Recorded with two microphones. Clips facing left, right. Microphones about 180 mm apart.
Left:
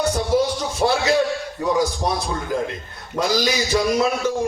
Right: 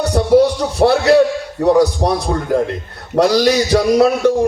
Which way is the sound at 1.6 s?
65° right (ahead or behind).